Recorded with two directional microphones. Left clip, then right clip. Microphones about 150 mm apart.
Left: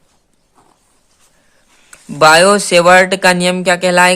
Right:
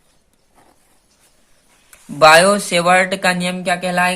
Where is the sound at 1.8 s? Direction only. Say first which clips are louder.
Left 1 dB; 45° left (ahead or behind).